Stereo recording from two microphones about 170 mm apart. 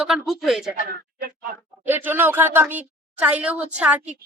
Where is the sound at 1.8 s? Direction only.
10° right (ahead or behind).